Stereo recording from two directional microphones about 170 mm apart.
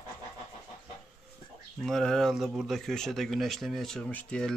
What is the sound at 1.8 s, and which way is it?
Speech, centre (ahead or behind).